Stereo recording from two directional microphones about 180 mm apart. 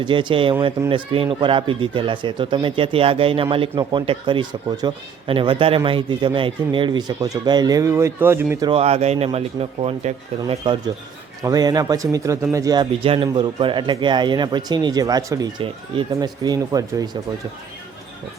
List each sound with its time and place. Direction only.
0.0 s speech: 25° right (ahead or behind)
8.6 s speech: 30° right (ahead or behind)
10.4 s speech: 25° right (ahead or behind)